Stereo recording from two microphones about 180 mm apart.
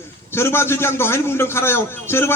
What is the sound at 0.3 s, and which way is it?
A man's voice, 15° left (ahead or behind).